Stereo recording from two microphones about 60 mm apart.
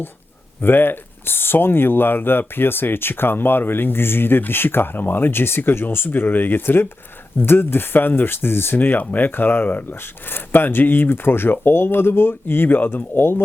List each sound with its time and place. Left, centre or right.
0.6 s speech: left